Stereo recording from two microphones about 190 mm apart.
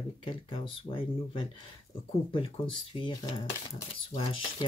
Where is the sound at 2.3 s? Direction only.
25° left (ahead or behind).